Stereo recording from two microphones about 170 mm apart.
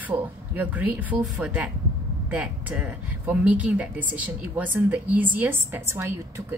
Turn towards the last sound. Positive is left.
turn(degrees=-15)  # may be behind; listen again after turning